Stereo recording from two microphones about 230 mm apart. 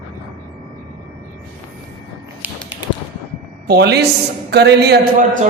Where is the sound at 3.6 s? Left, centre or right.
Right.